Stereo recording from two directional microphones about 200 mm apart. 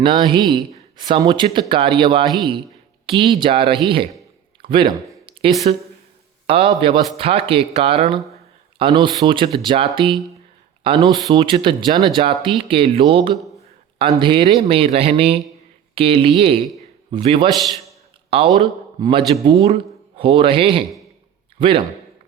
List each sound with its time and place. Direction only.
0.0 s speech: 25° right (ahead or behind)
4.6 s a sound: 25° right (ahead or behind)
6.5 s speech: 30° right (ahead or behind)
17.5 s a man's voice: centre (ahead or behind)
18.3 s a man's voice: 30° right (ahead or behind)